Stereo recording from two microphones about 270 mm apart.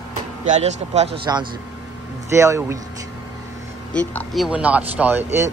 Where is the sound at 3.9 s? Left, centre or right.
Centre.